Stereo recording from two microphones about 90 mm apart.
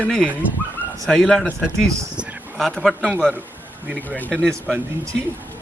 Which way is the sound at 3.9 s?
20° right (ahead or behind).